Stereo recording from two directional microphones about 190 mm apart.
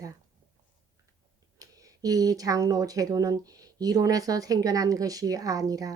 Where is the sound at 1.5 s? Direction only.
20° right (ahead or behind).